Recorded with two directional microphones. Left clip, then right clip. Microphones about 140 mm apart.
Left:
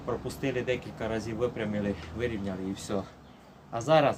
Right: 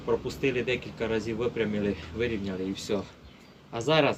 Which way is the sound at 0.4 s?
25° left (ahead or behind).